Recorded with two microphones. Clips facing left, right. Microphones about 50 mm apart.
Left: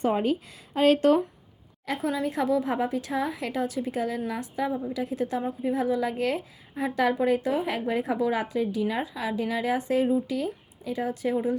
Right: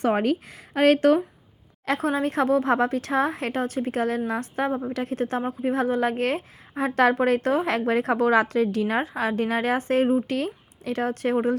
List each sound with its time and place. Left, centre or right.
0.0 s speech: right
1.8 s a woman's voice: right
2.0 s a woman's voice: right